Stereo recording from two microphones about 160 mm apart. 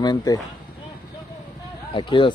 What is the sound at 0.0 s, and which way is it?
Speech, 25° left (ahead or behind).